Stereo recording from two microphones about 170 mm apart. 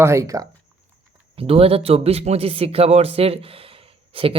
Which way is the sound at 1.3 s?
35° right (ahead or behind).